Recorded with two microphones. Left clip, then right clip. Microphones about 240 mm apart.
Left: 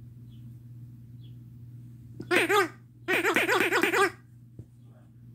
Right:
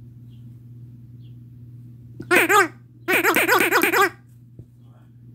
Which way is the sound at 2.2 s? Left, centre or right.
Centre.